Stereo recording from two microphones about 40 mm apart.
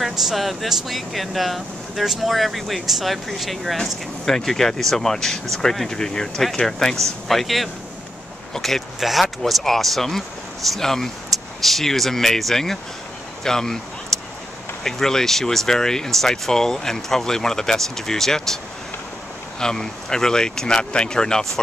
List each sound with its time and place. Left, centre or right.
0.0 s speech: centre
13.4 s a sound: centre
14.8 s speech: centre
19.6 s speech: centre